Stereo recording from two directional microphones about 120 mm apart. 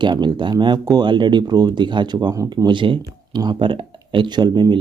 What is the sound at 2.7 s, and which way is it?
Speech, 40° right (ahead or behind).